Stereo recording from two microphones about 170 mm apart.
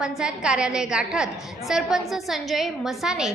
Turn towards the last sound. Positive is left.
turn(degrees=-5)  # may be behind; listen again after turning